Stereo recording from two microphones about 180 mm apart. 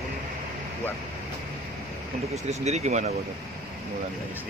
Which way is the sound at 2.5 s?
40° right (ahead or behind).